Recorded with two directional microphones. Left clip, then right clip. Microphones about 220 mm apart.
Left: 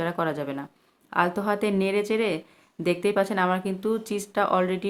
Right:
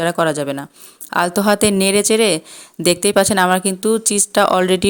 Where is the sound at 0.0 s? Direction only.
40° right (ahead or behind).